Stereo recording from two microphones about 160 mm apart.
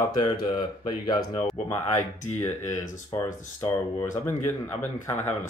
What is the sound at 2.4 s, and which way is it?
Speech, 15° left (ahead or behind).